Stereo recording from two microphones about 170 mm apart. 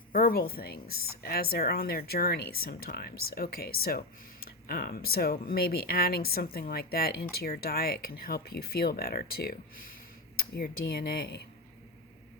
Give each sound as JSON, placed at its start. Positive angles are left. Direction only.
{"t": 0.1, "sound": "a woman's voice", "side_deg": 60}